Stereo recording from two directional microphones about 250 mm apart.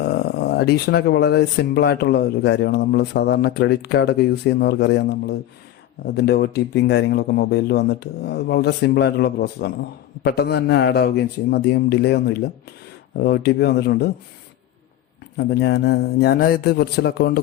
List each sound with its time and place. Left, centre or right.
0.0 s speech: left
15.4 s speech: left